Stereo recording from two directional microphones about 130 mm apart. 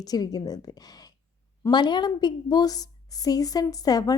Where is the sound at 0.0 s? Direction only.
30° left (ahead or behind).